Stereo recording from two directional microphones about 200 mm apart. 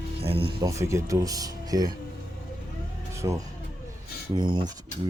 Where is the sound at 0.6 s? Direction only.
15° right (ahead or behind).